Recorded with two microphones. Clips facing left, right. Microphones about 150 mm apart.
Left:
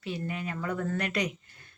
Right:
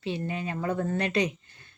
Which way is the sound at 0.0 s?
25° right (ahead or behind).